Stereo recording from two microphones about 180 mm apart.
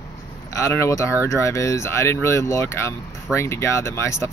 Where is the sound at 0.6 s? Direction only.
15° left (ahead or behind).